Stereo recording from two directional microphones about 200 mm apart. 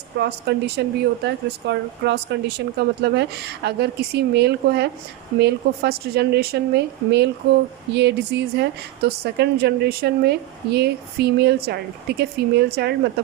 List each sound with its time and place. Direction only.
0.2 s a woman's voice: 55° right (ahead or behind)